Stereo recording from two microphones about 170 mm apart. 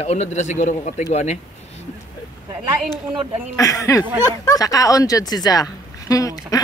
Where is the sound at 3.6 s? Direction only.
20° left (ahead or behind).